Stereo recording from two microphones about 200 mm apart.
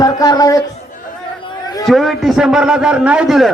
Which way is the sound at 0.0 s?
20° left (ahead or behind).